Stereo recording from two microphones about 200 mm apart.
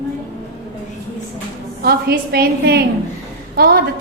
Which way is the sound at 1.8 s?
50° right (ahead or behind).